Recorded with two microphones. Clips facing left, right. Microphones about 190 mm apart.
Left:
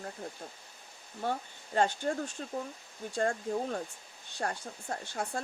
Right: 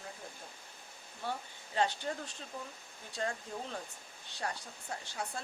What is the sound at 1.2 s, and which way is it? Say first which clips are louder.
Speech: left 6 dB; 50° left (ahead or behind).